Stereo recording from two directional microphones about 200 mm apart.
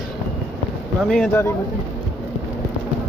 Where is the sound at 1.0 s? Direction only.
5° left (ahead or behind).